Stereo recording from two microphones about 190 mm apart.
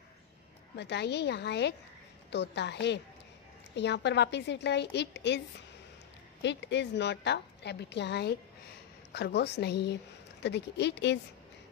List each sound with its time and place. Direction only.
0.7 s a woman's voice: 65° left (ahead or behind)
6.4 s a woman's voice: 70° left (ahead or behind)